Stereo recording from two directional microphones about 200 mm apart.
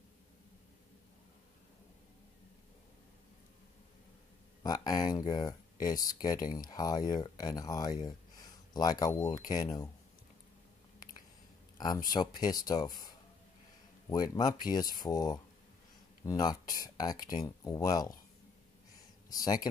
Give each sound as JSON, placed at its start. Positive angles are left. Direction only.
{"t": 4.6, "sound": "speech", "side_deg": 20}
{"t": 12.1, "sound": "speech", "side_deg": 20}
{"t": 19.4, "sound": "speech", "side_deg": 20}